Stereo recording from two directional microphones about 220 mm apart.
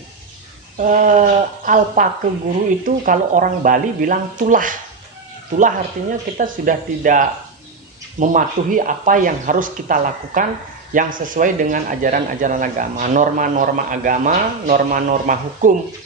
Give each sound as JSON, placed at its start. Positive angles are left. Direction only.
{"t": 0.8, "sound": "speech", "side_deg": -35}